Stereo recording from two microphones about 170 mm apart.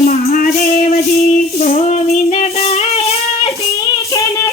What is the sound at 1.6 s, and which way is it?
Child singing, 35° left (ahead or behind).